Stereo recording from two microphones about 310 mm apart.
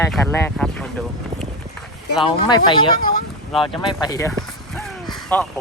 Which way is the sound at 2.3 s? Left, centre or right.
Centre.